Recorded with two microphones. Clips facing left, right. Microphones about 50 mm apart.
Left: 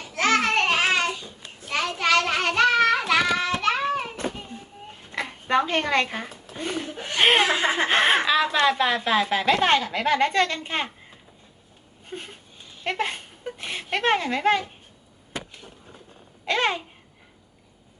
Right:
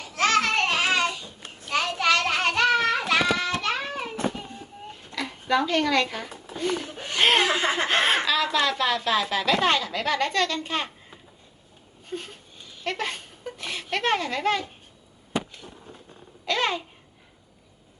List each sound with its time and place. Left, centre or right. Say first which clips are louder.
0.0 s a sound: left 1 dB; left
1.7 s child singing: left 1 dB; left
5.1 s a sound: left 2 dB; left
6.6 s a woman's voice: right 2 dB; left
12.1 s a woman's voice: right 2 dB; left
16.5 s a woman's voice: left 2 dB; left